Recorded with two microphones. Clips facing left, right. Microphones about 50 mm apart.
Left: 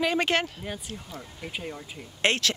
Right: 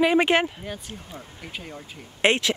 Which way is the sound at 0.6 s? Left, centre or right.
Centre.